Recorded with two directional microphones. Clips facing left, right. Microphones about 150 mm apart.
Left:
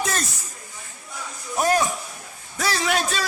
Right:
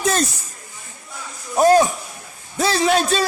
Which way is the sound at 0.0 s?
30° right (ahead or behind).